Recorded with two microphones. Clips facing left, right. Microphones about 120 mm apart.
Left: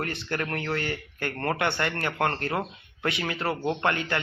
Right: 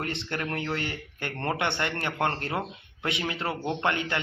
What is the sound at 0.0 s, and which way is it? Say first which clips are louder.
Speech: left 1 dB; 20° right (ahead or behind).